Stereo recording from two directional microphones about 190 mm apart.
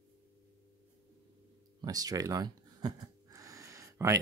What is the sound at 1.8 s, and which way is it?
Speech, 20° right (ahead or behind).